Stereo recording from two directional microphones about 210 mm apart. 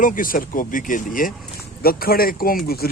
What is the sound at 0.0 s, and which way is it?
Speech, 40° left (ahead or behind).